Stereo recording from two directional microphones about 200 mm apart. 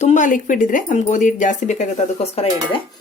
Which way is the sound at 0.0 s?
40° left (ahead or behind).